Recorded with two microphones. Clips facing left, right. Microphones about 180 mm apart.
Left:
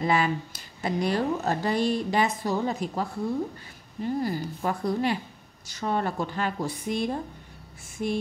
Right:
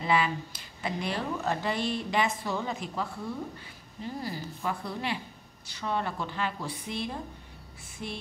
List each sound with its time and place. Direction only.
0.0 s a woman's voice: 45° left (ahead or behind)